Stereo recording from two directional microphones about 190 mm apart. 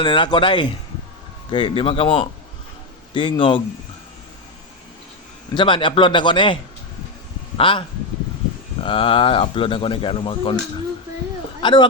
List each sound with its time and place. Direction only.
0.0 s speech: 25° left (ahead or behind)
5.5 s speech: 25° left (ahead or behind)
11.6 s speech: 25° left (ahead or behind)